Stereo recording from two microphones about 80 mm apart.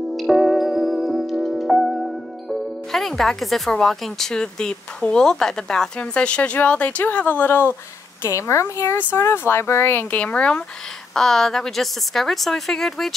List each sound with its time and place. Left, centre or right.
0.1 s music: centre
2.9 s speech: centre; by 7.7 s left
8.2 s a woman's voice: left; by 13.1 s centre